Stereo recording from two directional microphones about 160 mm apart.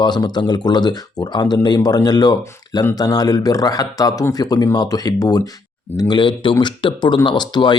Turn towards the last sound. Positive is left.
turn(degrees=30)  # may be behind; listen again after turning